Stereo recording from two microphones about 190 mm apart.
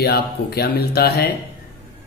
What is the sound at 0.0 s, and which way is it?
Speech, 55° left (ahead or behind).